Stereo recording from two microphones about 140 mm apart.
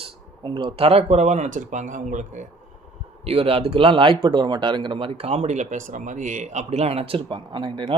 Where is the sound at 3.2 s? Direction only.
45° right (ahead or behind).